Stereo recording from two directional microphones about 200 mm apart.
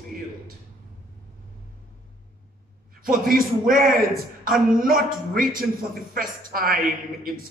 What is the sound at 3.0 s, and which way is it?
Speech, 45° right (ahead or behind).